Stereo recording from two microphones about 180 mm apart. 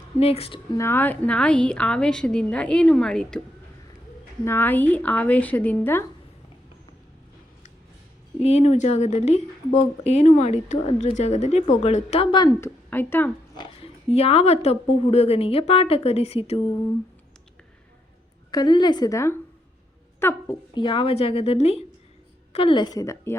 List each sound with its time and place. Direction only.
0.2 s speech: 35° left (ahead or behind)
0.8 s a woman's voice: 10° left (ahead or behind)
4.4 s a woman's voice: 10° left (ahead or behind)
8.4 s speech: 35° left (ahead or behind); by 13.3 s 10° left (ahead or behind)
13.6 s speech: 35° left (ahead or behind)
18.5 s a woman's voice: 25° left (ahead or behind)
20.7 s a woman's voice: 25° left (ahead or behind)